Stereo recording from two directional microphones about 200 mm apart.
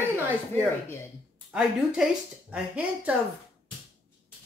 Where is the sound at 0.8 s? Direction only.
15° left (ahead or behind).